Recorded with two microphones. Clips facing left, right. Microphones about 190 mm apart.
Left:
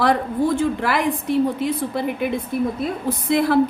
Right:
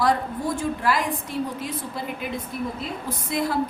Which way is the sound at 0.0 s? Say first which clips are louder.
Left 4 dB; 70° left (ahead or behind).